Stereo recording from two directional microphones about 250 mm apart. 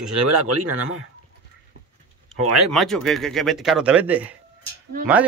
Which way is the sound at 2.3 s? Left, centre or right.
Right.